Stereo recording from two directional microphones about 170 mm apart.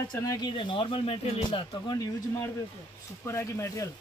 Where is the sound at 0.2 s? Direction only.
25° left (ahead or behind).